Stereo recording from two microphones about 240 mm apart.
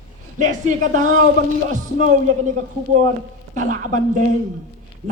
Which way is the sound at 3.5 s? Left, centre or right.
Right.